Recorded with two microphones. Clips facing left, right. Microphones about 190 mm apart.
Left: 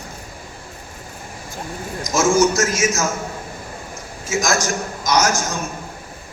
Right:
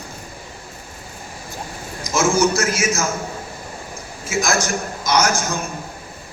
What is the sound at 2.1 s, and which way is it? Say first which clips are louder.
Speech: left 1 dB; 40° left (ahead or behind).